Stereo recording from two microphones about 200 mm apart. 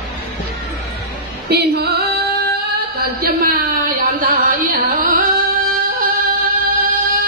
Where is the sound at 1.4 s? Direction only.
50° right (ahead or behind).